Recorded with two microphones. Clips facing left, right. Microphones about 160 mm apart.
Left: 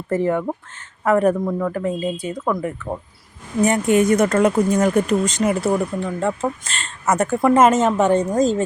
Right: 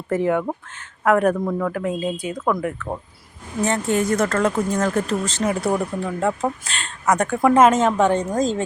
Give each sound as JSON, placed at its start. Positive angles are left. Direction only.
{"t": 0.1, "sound": "speech", "side_deg": 0}
{"t": 3.6, "sound": "speech", "side_deg": 15}
{"t": 5.5, "sound": "speech", "side_deg": 0}